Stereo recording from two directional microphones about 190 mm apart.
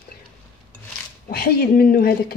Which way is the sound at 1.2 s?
55° left (ahead or behind).